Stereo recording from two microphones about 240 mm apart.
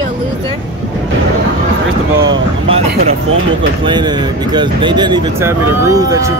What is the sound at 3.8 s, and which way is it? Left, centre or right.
Speech, centre.